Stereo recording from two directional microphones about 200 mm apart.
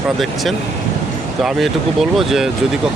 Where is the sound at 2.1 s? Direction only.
Centre (ahead or behind).